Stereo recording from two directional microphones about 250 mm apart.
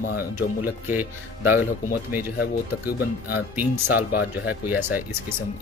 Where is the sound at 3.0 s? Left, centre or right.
Left.